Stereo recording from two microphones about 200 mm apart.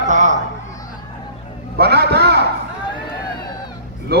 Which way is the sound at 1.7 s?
55° right (ahead or behind).